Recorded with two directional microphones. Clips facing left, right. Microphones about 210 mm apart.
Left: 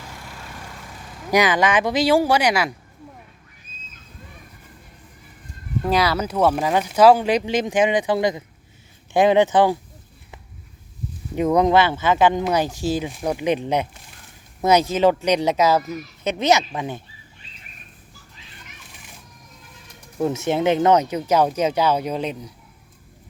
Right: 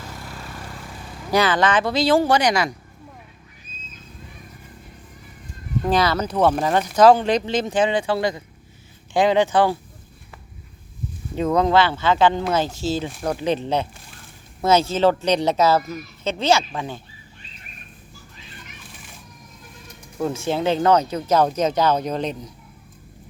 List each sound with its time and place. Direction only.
1.3 s speech: 15° left (ahead or behind)
5.8 s speech: 10° left (ahead or behind)
11.3 s speech: 15° left (ahead or behind)
20.1 s speech: 20° left (ahead or behind)